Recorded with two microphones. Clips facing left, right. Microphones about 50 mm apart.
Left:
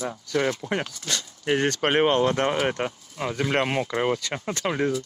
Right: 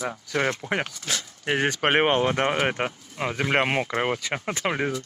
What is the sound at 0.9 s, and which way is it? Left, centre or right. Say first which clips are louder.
Speech: even; centre.